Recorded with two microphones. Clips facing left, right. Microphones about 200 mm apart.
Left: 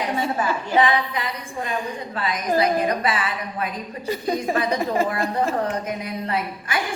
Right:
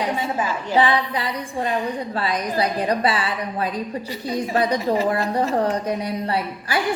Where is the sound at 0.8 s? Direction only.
30° right (ahead or behind).